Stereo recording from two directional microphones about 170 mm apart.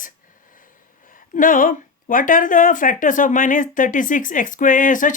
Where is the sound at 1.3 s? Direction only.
50° left (ahead or behind).